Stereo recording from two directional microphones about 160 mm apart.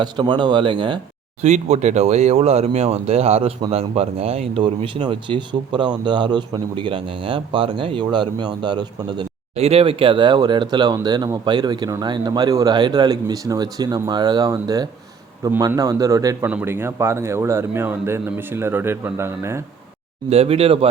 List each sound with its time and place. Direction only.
0.0 s speech: 30° right (ahead or behind)
1.4 s speech: 45° right (ahead or behind); by 19.6 s 15° right (ahead or behind)
20.3 s speech: 40° right (ahead or behind)